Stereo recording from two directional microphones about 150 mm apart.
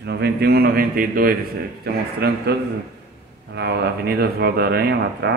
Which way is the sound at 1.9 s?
90° right.